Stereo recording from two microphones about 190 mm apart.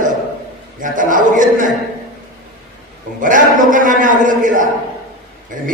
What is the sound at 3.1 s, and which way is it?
A man's voice, 45° right (ahead or behind).